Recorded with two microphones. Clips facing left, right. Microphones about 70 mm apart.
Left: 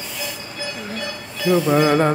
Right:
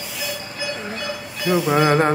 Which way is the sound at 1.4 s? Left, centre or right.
Centre.